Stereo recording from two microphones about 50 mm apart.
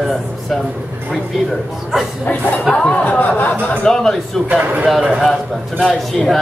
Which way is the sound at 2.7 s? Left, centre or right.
Centre.